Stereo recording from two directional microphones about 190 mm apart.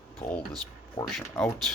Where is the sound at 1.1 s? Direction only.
Centre (ahead or behind).